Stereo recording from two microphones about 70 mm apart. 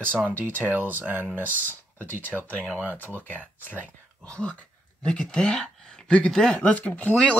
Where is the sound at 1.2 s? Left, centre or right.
Left.